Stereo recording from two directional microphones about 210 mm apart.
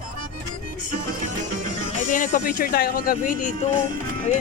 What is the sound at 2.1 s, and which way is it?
Speech, 40° left (ahead or behind).